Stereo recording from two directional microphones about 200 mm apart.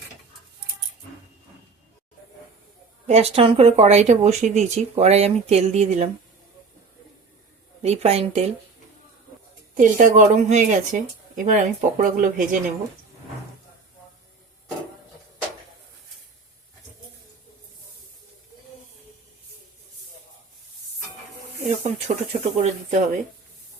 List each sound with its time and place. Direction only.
3.1 s speech: 30° right (ahead or behind)
7.8 s speech: 30° right (ahead or behind)
9.7 s speech: 40° right (ahead or behind)
21.9 s speech: 35° right (ahead or behind)